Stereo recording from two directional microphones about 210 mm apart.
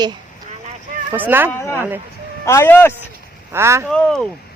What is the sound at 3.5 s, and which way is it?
Speech, 15° right (ahead or behind).